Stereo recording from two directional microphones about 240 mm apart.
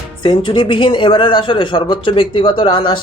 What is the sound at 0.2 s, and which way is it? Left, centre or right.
Speech, centre.